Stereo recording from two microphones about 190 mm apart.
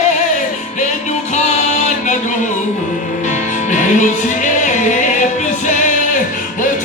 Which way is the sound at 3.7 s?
40° left (ahead or behind).